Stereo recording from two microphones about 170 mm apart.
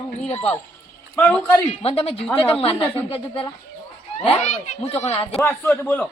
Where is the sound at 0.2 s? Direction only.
40° left (ahead or behind).